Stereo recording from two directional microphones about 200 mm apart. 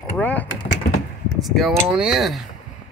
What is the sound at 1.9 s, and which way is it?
Speech, 5° right (ahead or behind).